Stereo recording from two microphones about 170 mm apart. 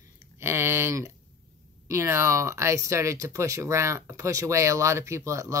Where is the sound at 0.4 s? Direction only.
15° right (ahead or behind).